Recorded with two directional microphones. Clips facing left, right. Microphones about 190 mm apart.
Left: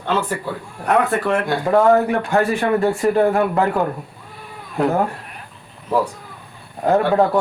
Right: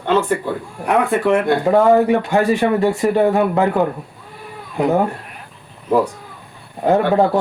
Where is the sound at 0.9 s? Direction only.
20° right (ahead or behind).